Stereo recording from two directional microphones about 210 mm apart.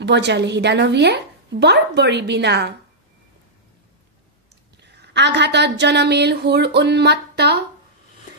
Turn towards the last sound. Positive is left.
turn(degrees=-50)  # may be behind; listen again after turning